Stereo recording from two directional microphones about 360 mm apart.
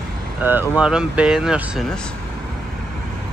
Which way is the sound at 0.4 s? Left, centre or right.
Centre.